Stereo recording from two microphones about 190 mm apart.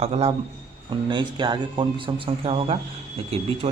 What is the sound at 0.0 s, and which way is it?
Speech, 30° right (ahead or behind).